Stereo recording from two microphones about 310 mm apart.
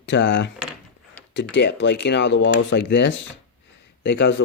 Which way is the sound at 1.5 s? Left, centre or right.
Left.